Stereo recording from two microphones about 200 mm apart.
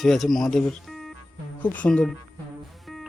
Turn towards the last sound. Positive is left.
turn(degrees=0)  # may be behind; listen again after turning